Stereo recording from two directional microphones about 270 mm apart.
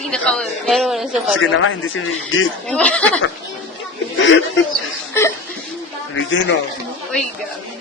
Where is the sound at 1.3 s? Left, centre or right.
Left.